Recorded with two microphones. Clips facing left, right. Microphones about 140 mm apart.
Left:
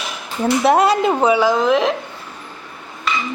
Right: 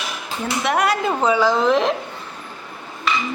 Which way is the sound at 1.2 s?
15° left (ahead or behind).